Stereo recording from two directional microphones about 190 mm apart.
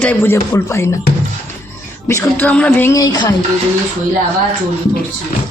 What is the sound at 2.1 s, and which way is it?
A man's voice, 10° left (ahead or behind).